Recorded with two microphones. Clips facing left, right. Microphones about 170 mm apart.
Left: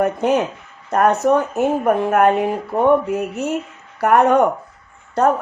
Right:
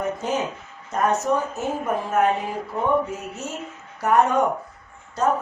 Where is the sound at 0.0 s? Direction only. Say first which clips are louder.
Left 8 dB; 65° left (ahead or behind).